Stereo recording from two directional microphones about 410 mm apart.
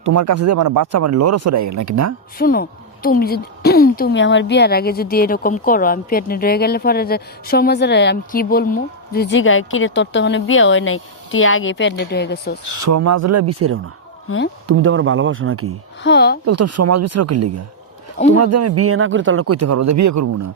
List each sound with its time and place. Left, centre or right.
0.0 s a man's voice: right
0.6 s speech: right
0.9 s a man's voice: right
2.4 s a woman's voice: left
12.6 s a man's voice: right
14.3 s a woman's voice: left
14.7 s speech: right
16.0 s a woman's voice: left
16.5 s a man's voice: right